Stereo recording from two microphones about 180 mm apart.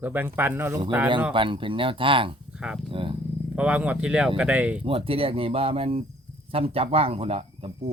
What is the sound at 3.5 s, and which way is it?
Speech, 5° right (ahead or behind).